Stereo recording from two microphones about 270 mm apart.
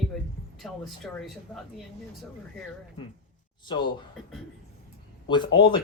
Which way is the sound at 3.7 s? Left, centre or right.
Centre.